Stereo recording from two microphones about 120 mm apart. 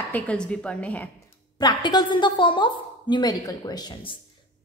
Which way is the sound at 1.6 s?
35° left (ahead or behind).